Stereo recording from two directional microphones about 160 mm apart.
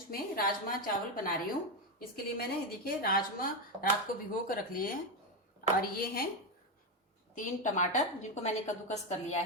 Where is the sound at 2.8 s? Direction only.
65° left (ahead or behind).